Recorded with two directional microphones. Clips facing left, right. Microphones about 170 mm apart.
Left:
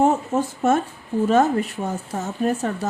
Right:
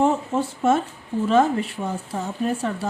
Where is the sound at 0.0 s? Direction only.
45° left (ahead or behind).